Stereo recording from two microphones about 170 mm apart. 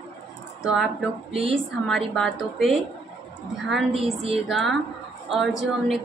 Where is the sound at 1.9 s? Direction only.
Centre (ahead or behind).